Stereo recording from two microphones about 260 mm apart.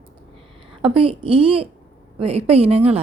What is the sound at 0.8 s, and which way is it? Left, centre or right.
A woman's voice, right.